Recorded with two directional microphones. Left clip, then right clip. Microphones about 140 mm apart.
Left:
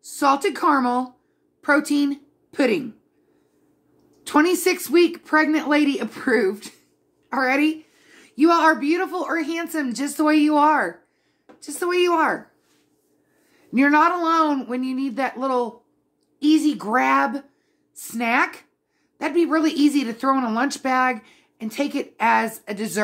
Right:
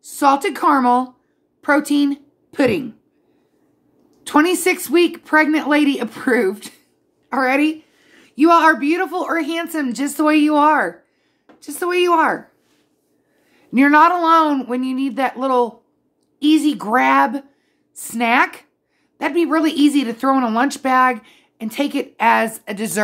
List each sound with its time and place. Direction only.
0.0 s a woman's voice: 10° right (ahead or behind)
4.2 s a woman's voice: 10° right (ahead or behind)
8.4 s a woman's voice: 20° right (ahead or behind)
13.5 s a woman's voice: 20° right (ahead or behind)